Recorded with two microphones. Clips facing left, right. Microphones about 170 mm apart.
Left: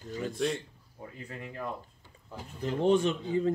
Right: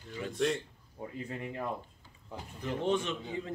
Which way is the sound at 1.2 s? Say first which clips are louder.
Right 2 dB; 25° right (ahead or behind).